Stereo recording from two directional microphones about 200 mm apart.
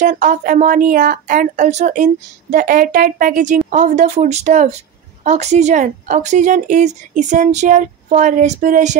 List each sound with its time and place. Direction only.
0.0 s speech: 40° right (ahead or behind)